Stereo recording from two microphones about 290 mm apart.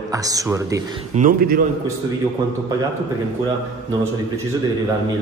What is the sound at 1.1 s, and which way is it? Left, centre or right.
Speech, right.